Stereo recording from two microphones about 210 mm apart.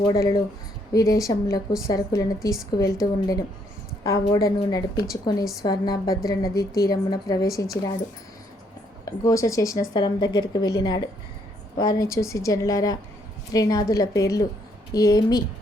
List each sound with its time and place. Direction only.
0.1 s a woman's voice: 15° left (ahead or behind)
9.0 s a woman's voice: 15° left (ahead or behind)